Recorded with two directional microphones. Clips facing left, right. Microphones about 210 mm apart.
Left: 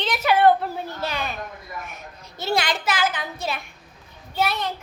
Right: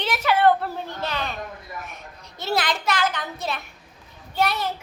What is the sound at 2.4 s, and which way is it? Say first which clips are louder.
A child's voice: left 1 dB; centre (ahead or behind).